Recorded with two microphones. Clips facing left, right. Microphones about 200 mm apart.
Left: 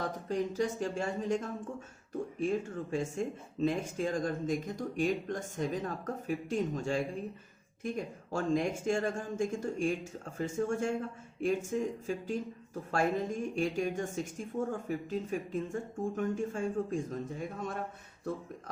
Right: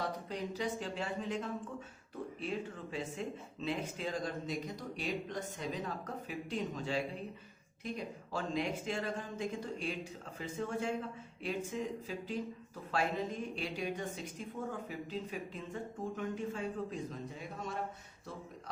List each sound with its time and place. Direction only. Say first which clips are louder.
0.0 s speech: left 5 dB; 45° left (ahead or behind)